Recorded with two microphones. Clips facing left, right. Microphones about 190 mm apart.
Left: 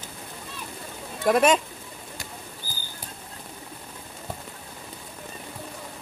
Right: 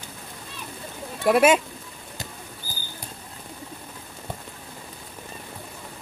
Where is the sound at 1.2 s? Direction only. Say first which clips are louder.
Right 2 dB; 5° right (ahead or behind).